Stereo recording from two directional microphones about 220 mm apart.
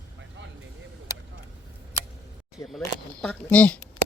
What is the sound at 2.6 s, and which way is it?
Camera, centre (ahead or behind).